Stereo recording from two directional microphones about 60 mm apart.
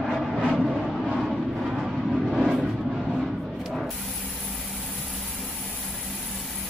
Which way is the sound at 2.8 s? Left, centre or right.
Centre.